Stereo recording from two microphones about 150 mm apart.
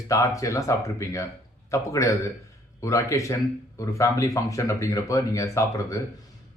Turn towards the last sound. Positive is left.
turn(degrees=20)  # may be behind; listen again after turning